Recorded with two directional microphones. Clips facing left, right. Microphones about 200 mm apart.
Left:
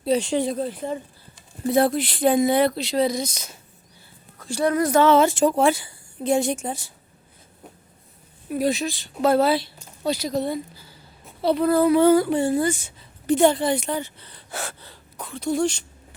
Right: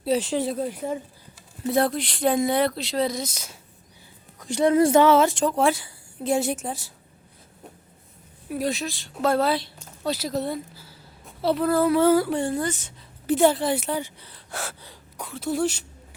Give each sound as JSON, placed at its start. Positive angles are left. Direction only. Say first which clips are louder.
{"t": 0.0, "sound": "speech", "louder": "left 2 dB", "side_deg": -5}
{"t": 1.6, "sound": "speech", "louder": "left 3 dB", "side_deg": 0}
{"t": 4.4, "sound": "a woman's voice", "louder": "right 3 dB", "side_deg": -20}
{"t": 5.0, "sound": "speech", "louder": "left 2 dB", "side_deg": 0}
{"t": 8.4, "sound": "speech", "louder": "left 4 dB", "side_deg": 0}
{"t": 13.2, "sound": "speech", "louder": "left 2 dB", "side_deg": -5}
{"t": 14.3, "sound": "gasp", "louder": "left 1 dB", "side_deg": 0}
{"t": 14.8, "sound": "speech", "louder": "even", "side_deg": -10}